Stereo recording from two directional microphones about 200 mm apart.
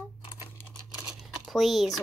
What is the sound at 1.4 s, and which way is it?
Speech, centre (ahead or behind).